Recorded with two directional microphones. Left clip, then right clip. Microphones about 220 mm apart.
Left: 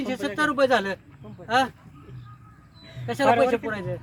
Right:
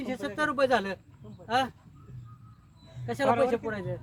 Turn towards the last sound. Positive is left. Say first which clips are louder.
# left 4 dB
turn(degrees=-15)  # may be behind; listen again after turning